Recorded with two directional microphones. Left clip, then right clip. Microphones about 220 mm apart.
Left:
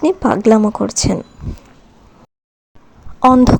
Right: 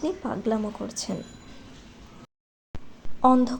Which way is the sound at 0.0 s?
40° left (ahead or behind).